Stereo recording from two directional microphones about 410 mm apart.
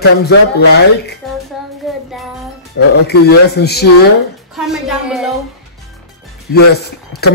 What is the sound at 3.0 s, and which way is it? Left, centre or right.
Speech, left.